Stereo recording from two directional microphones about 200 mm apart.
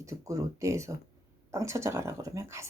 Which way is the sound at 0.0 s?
15° right (ahead or behind).